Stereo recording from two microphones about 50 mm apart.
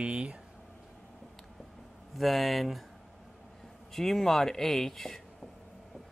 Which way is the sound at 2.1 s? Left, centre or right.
Centre.